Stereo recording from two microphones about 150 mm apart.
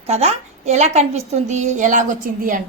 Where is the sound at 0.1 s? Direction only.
45° right (ahead or behind).